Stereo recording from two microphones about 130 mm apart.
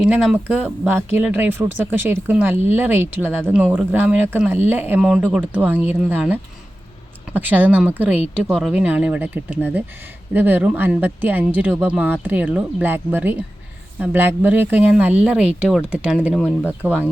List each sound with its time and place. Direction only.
0.0 s speech: 5° right (ahead or behind)